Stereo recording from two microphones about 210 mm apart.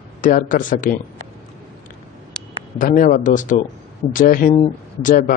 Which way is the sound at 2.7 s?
40° left (ahead or behind).